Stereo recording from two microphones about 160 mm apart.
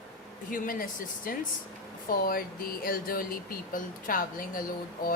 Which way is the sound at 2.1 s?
65° left (ahead or behind).